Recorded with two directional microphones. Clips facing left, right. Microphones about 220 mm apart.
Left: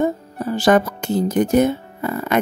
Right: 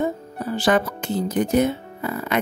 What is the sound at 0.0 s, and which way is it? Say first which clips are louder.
Speech: left 4 dB; 45° left (ahead or behind).